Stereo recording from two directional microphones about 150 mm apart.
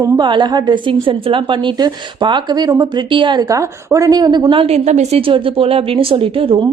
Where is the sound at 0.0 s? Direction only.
30° right (ahead or behind).